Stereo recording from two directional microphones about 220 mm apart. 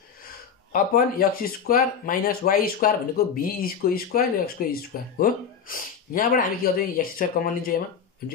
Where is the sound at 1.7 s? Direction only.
40° left (ahead or behind).